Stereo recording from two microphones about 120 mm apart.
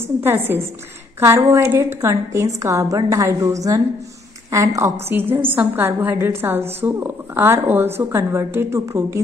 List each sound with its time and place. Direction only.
0.5 s a woman's voice: 20° right (ahead or behind)